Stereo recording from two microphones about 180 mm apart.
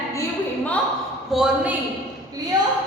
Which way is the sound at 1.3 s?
Centre (ahead or behind).